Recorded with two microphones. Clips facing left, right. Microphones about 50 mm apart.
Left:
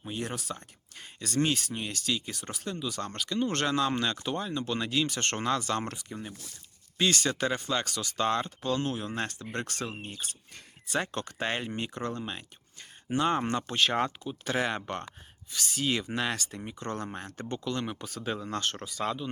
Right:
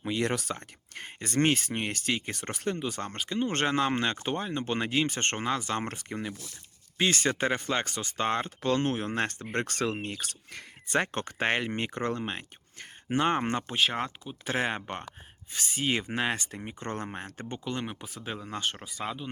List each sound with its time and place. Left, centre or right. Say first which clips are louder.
0.0 s speech: right 6 dB; right
6.0 s speech: right 5 dB; right
7.0 s speech: right 1 dB; right
8.6 s speech: right 3 dB; right
10.0 s speech: right 4 dB; right
11.0 s speech: right 3 dB; right
13.7 s speech: left 1 dB; centre
14.3 s speech: even; right